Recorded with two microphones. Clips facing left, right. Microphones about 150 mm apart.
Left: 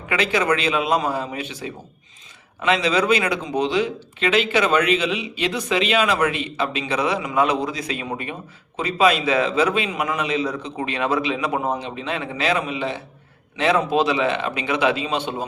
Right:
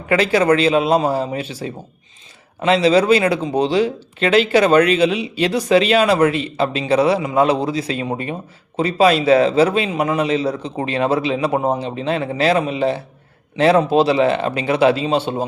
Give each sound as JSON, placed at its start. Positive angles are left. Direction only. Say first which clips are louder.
{"t": 0.1, "sound": "speech", "louder": "right 6 dB", "side_deg": -35}